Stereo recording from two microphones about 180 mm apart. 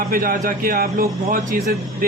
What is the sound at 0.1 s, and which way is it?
A man's voice, 50° right (ahead or behind).